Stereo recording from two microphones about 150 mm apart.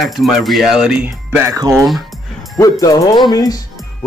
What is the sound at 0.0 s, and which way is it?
Speech, centre (ahead or behind).